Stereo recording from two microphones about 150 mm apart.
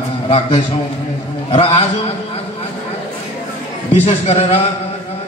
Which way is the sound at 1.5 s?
40° left (ahead or behind).